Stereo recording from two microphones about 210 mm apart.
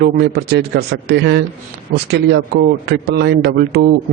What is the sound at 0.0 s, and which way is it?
Speech, 50° right (ahead or behind).